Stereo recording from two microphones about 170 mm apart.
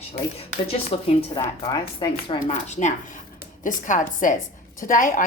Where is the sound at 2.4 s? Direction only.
45° left (ahead or behind).